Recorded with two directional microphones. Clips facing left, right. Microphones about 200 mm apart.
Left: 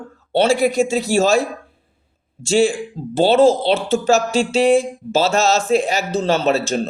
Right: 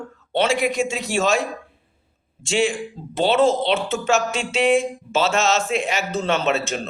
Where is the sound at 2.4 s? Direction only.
35° left (ahead or behind).